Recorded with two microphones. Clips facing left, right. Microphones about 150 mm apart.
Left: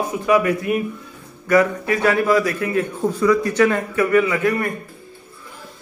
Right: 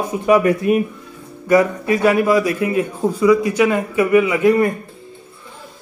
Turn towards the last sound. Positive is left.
turn(degrees=-25)  # may be behind; listen again after turning